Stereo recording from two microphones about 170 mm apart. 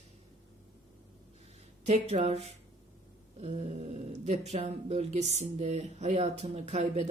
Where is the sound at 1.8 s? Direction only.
40° right (ahead or behind).